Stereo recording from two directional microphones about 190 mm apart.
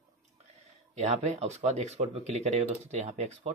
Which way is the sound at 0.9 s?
35° right (ahead or behind).